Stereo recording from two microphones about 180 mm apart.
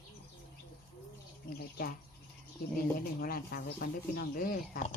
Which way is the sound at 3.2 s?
55° left (ahead or behind).